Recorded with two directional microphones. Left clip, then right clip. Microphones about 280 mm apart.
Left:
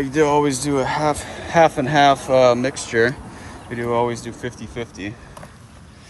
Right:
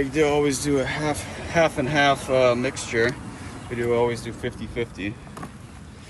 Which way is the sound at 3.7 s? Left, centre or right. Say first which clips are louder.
Left 2 dB; left.